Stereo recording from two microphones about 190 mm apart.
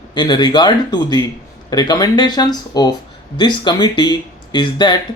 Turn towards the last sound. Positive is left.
turn(degrees=25)  # may be behind; listen again after turning